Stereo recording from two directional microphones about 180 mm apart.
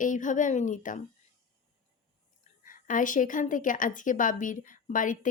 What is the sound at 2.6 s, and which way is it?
A woman's voice, 50° left (ahead or behind).